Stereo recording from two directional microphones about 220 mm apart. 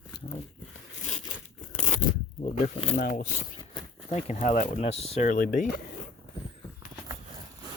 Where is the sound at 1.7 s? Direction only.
35° left (ahead or behind).